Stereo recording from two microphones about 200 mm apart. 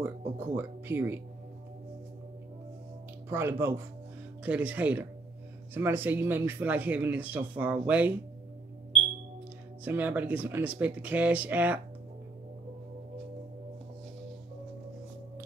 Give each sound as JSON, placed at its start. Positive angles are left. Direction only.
{"t": 0.4, "sound": "speech", "side_deg": -10}
{"t": 3.3, "sound": "speech", "side_deg": -15}
{"t": 9.8, "sound": "speech", "side_deg": -10}